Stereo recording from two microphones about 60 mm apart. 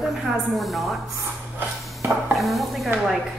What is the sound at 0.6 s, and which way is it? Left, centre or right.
Speech, centre.